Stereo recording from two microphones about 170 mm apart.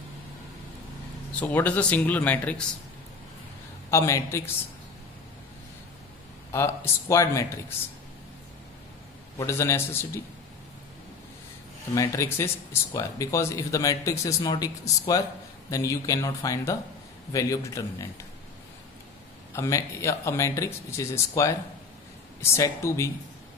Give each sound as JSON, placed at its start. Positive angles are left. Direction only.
{"t": 1.4, "sound": "speech", "side_deg": 10}
{"t": 3.9, "sound": "speech", "side_deg": 15}
{"t": 6.5, "sound": "speech", "side_deg": 15}
{"t": 9.4, "sound": "speech", "side_deg": 15}
{"t": 11.9, "sound": "speech", "side_deg": 20}
{"t": 19.5, "sound": "speech", "side_deg": 15}